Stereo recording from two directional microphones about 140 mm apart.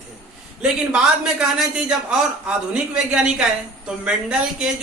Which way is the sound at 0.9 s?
5° right (ahead or behind).